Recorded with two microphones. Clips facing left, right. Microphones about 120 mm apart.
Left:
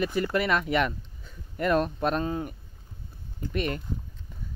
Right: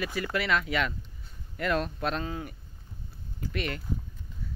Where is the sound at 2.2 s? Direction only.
30° left (ahead or behind).